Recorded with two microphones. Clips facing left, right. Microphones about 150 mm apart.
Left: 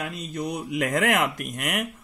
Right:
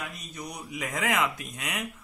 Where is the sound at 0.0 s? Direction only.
70° left (ahead or behind).